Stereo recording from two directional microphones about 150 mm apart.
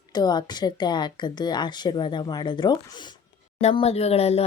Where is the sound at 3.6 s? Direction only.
45° left (ahead or behind).